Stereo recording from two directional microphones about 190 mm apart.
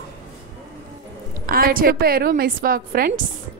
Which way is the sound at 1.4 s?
50° right (ahead or behind).